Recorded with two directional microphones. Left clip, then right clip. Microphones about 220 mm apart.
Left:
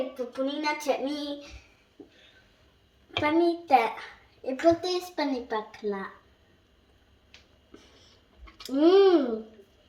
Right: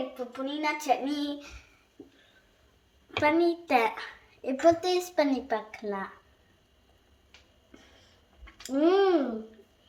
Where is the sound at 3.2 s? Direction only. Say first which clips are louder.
Even; 25° right (ahead or behind).